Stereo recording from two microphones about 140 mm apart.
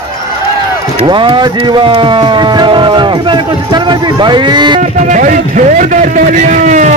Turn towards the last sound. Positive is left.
turn(degrees=-65)  # may be behind; listen again after turning